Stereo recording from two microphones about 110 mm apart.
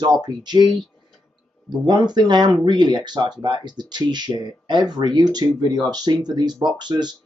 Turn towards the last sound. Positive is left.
turn(degrees=-40)  # may be behind; listen again after turning